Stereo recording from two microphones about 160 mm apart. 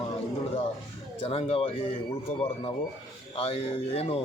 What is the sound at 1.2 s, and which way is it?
Speech, 40° left (ahead or behind).